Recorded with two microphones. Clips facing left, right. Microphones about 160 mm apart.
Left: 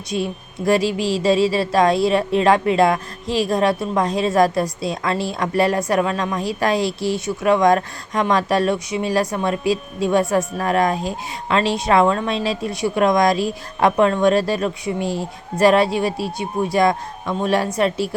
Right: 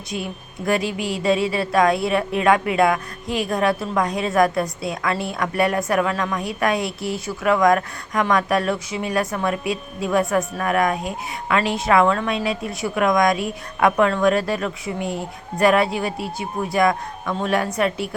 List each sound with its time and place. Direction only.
0.1 s speech: 25° left (ahead or behind)